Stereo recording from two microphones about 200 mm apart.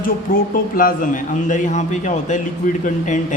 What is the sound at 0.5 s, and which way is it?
A man's voice, 45° left (ahead or behind).